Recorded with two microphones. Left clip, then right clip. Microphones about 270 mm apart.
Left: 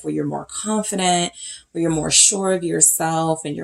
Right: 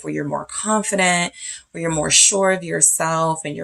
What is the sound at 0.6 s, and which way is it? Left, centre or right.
Speech, right.